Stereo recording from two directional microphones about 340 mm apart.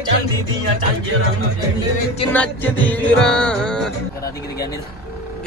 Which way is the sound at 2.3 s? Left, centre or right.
Centre.